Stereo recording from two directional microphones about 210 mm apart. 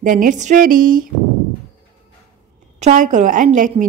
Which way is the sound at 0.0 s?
40° right (ahead or behind).